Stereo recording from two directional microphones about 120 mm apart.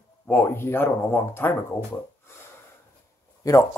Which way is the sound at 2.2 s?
20° left (ahead or behind).